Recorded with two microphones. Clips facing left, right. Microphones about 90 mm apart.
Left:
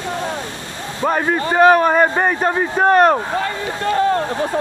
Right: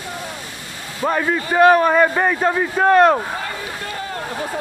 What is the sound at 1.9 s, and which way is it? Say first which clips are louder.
A man's voice: left 1 dB; 25° left (ahead or behind).